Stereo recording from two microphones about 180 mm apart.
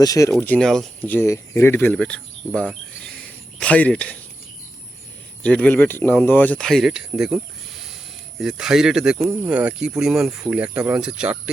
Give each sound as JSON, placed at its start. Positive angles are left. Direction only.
{"t": 0.0, "sound": "speech", "side_deg": 20}
{"t": 0.3, "sound": "speech", "side_deg": 10}
{"t": 5.4, "sound": "speech", "side_deg": 5}
{"t": 8.4, "sound": "speech", "side_deg": -5}